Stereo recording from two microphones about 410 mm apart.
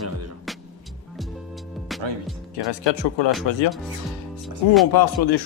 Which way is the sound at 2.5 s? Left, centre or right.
Left.